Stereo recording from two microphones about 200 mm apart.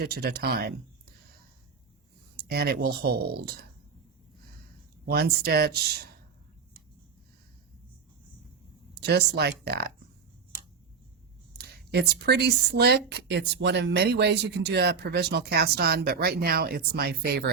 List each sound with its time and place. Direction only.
0.0 s speech: 50° right (ahead or behind)
2.3 s speech: 50° right (ahead or behind)
5.1 s speech: 50° right (ahead or behind)
9.0 s speech: 55° right (ahead or behind)
11.5 s speech: 55° right (ahead or behind)